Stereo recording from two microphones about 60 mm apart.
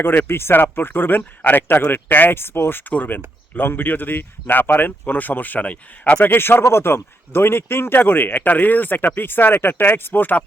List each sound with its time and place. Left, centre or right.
0.0 s a man's voice: left
6.3 s a man's voice: left